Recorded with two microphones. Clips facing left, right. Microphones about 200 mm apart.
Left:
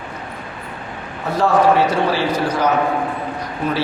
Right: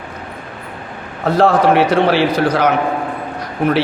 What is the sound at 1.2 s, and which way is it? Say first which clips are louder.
A man's voice: right 3 dB; 80° right.